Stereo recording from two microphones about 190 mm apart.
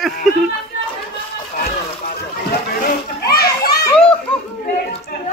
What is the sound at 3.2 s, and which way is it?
Children playing, 55° left (ahead or behind).